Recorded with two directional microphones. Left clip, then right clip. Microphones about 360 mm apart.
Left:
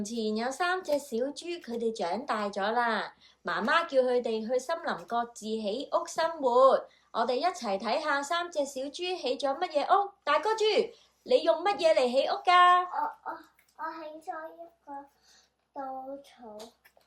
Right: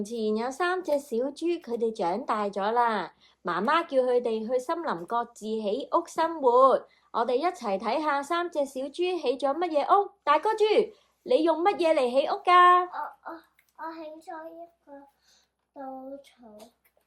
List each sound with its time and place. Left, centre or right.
0.0 s speech: centre